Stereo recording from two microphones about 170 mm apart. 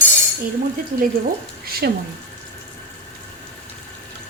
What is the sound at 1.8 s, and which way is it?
Speech, 70° right (ahead or behind).